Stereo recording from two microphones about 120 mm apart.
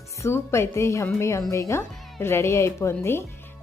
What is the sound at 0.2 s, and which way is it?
A woman's voice, 20° left (ahead or behind).